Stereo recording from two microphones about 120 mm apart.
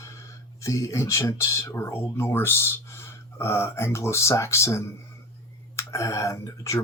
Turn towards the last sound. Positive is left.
turn(degrees=25)  # may be behind; listen again after turning